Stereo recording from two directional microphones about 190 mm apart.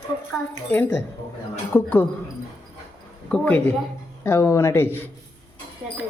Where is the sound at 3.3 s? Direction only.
10° left (ahead or behind).